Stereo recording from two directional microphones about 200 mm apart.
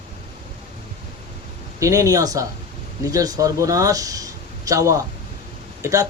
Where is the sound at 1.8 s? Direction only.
15° right (ahead or behind).